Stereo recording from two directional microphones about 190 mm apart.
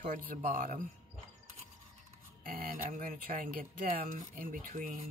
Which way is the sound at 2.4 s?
50° right (ahead or behind).